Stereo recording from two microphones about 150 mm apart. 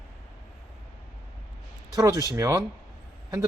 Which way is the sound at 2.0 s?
20° right (ahead or behind).